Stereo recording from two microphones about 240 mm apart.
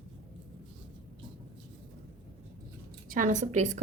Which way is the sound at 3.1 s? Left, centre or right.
Right.